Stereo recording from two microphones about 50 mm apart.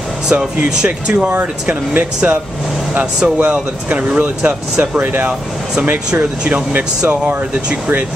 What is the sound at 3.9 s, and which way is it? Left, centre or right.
Speech, right.